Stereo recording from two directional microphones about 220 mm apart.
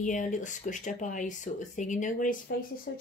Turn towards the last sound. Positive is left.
turn(degrees=50)  # may be behind; listen again after turning